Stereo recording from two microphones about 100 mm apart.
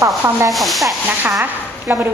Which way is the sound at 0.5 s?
Centre (ahead or behind).